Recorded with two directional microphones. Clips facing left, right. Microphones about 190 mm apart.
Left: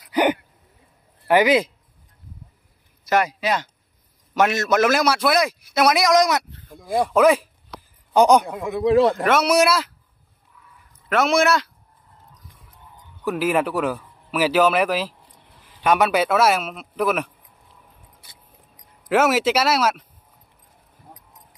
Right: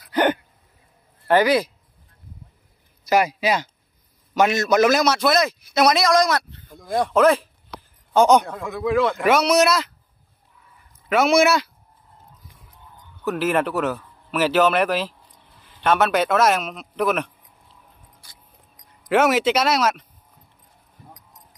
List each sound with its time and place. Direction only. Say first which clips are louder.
0.1 s gasp: even; 15° left (ahead or behind)
1.2 s speech: left 1 dB; 15° left (ahead or behind)
3.1 s a man's voice: right 1 dB; 5° right (ahead or behind); by 8.8 s 20° left (ahead or behind)
8.8 s speech: left 4 dB; 35° left (ahead or behind)
9.2 s speech: right 1 dB; 5° left (ahead or behind)
11.1 s speech: right 2 dB; centre (ahead or behind)
13.2 s a man's voice: even; 10° left (ahead or behind)
19.0 s speech: even; 5° left (ahead or behind)